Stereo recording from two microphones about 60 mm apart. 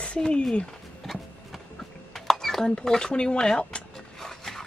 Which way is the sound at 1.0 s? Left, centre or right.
Centre.